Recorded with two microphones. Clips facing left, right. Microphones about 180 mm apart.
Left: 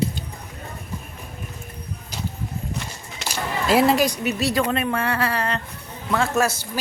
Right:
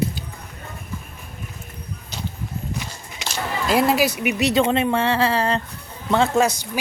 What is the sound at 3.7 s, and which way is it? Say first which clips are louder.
A woman's voice: left 1 dB; centre (ahead or behind).